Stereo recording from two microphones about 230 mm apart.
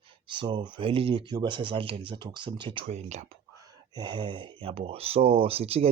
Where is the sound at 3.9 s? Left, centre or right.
Centre.